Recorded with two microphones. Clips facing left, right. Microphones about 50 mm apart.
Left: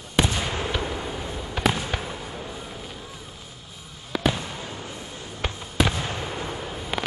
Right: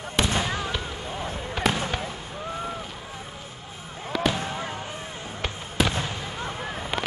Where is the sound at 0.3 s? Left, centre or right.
Right.